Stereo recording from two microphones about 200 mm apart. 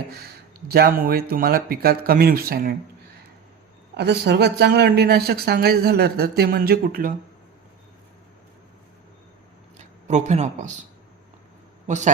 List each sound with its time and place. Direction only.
0.7 s speech: 50° right (ahead or behind)
3.9 s speech: 60° right (ahead or behind)
9.7 s speech: 35° right (ahead or behind)
11.9 s a man's voice: 35° right (ahead or behind)